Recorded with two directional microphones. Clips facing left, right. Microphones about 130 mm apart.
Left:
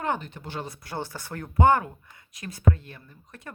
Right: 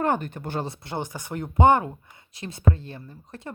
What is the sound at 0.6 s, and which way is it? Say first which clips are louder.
Speech: right 3 dB; 25° right (ahead or behind).